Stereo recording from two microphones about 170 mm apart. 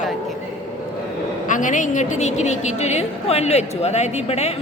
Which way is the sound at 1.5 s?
50° left (ahead or behind).